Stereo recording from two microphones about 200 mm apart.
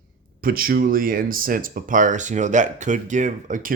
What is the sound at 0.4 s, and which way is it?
Speech, 45° right (ahead or behind).